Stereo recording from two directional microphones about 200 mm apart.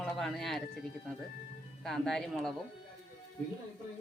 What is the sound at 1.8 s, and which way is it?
Speech, centre (ahead or behind).